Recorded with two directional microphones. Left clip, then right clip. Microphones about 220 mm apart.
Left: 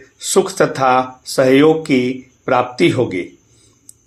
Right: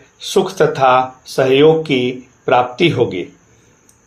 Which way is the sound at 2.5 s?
25° left (ahead or behind).